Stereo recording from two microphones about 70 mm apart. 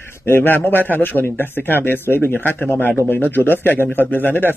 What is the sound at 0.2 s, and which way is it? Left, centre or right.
A man's voice, left.